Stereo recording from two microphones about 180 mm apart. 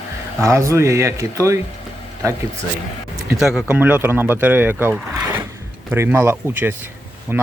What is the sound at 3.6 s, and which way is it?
Speech, 10° right (ahead or behind).